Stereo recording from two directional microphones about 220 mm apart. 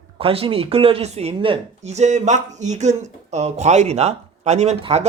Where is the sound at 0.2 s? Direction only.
25° right (ahead or behind).